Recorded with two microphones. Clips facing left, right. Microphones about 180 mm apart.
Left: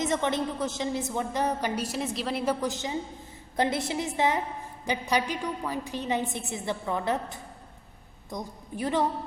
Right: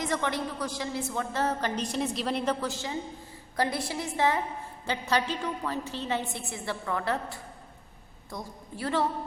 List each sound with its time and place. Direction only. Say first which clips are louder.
0.0 s a woman's voice: left 3 dB; 20° left (ahead or behind)